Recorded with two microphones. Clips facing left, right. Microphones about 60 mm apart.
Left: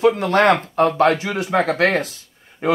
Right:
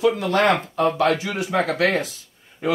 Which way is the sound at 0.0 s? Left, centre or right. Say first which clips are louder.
Left 3 dB; left.